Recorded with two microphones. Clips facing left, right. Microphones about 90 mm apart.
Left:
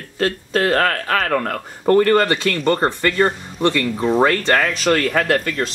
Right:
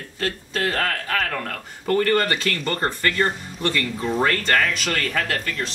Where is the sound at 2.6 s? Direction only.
35° left (ahead or behind).